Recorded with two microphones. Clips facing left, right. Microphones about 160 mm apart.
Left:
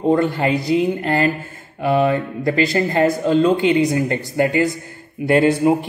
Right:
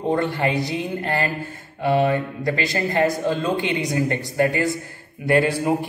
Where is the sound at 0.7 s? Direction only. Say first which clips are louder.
Left 8 dB; 25° left (ahead or behind).